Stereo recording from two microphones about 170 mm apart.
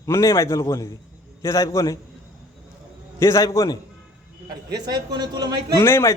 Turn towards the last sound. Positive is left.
turn(degrees=15)  # may be behind; listen again after turning